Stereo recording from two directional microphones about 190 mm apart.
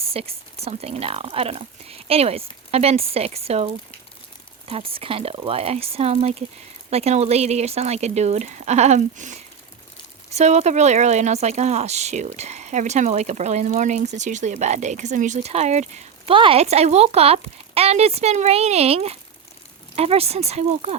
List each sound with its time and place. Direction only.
0.0 s speech: 30° right (ahead or behind)